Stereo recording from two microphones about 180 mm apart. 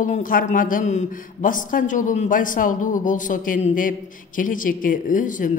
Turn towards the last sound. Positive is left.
turn(degrees=45)  # may be behind; listen again after turning